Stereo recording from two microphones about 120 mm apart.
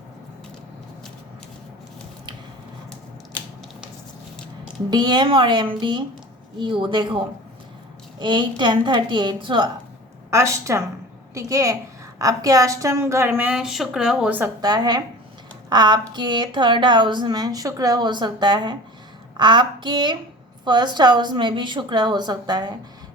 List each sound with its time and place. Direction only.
4.9 s speech: 40° right (ahead or behind)
10.3 s a woman's voice: 25° right (ahead or behind); by 14.3 s 5° right (ahead or behind)
14.6 s speech: 35° right (ahead or behind)